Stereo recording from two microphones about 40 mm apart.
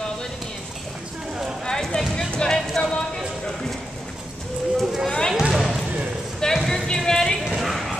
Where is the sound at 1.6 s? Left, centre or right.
Centre.